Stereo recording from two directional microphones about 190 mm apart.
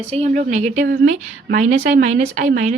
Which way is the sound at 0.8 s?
55° right (ahead or behind).